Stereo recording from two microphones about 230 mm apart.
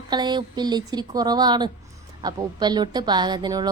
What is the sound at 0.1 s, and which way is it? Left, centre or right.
A woman's voice, centre.